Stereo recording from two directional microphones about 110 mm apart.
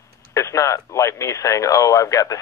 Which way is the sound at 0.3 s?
30° left (ahead or behind).